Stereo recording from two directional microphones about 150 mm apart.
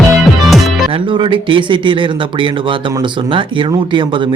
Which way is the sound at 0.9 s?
35° right (ahead or behind).